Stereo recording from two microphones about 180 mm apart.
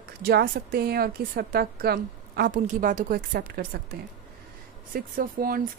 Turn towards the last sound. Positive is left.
turn(degrees=-50)  # may be behind; listen again after turning